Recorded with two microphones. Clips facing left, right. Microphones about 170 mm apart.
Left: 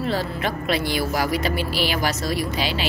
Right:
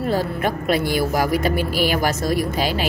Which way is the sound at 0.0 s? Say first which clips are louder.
Right 3 dB; 50° right (ahead or behind).